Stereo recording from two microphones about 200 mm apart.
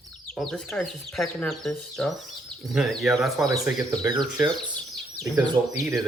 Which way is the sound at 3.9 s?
20° right (ahead or behind).